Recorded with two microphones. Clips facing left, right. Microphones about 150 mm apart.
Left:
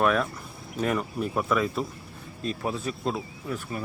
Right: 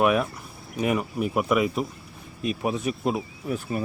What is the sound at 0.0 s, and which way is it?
Speech, 10° right (ahead or behind).